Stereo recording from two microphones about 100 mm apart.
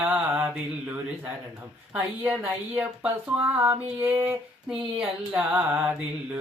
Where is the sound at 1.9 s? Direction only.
15° right (ahead or behind).